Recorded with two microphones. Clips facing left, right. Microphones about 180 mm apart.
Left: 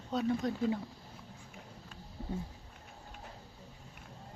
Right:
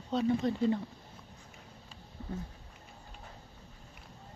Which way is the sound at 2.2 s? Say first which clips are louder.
Left 1 dB; 35° left (ahead or behind).